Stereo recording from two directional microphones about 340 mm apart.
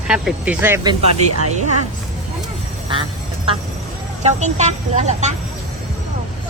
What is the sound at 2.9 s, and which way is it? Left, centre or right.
Quack, centre.